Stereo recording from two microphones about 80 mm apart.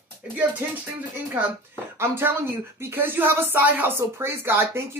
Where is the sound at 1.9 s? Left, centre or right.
Right.